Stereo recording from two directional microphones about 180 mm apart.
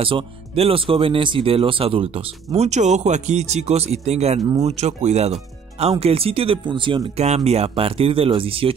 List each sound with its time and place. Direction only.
0.0 s speech: 30° right (ahead or behind)